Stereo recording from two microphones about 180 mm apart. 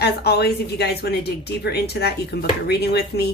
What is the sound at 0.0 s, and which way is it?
Speech, 65° left (ahead or behind).